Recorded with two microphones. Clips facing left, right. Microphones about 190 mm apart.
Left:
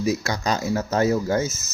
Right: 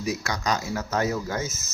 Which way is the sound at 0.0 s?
25° left (ahead or behind).